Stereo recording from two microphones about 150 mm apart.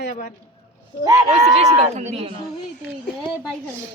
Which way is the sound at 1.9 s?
50° right (ahead or behind).